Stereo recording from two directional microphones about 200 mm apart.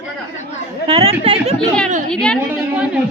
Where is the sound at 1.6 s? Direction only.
5° left (ahead or behind).